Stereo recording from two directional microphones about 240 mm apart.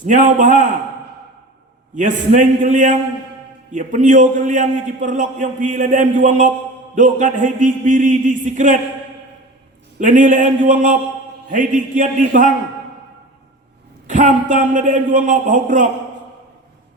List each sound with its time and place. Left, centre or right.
0.0 s a man's voice: right
2.0 s a man's voice: right
10.0 s a man's voice: right
14.1 s a man's voice: right